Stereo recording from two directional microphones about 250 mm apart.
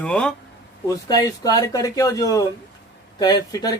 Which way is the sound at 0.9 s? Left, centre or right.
Centre.